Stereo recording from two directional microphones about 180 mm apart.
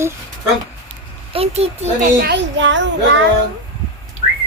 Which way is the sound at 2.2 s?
65° right (ahead or behind).